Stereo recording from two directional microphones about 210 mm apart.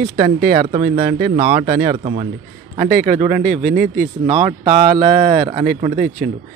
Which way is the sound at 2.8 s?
45° right (ahead or behind).